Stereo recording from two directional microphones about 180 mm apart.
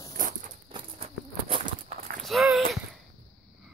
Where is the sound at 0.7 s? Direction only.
30° right (ahead or behind).